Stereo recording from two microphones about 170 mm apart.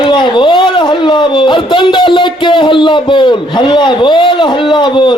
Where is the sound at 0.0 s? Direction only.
30° left (ahead or behind).